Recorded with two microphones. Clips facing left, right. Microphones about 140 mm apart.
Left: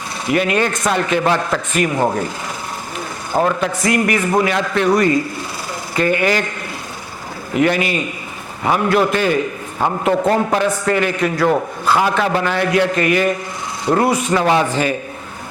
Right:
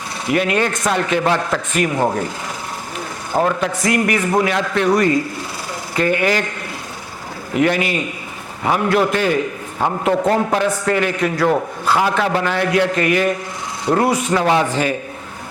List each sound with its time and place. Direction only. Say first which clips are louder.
0.3 s a man's voice: left 1 dB; 15° left (ahead or behind)
3.3 s speech: left 1 dB; 20° left (ahead or behind)
3.8 s a man's voice: left 1 dB; 10° left (ahead or behind)
7.5 s a man's voice: left 1 dB; 15° left (ahead or behind)